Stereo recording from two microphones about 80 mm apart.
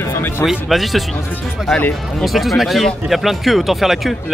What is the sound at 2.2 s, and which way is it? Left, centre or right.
Speech, centre.